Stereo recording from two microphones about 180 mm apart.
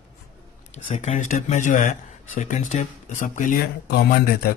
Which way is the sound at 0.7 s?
40° left (ahead or behind).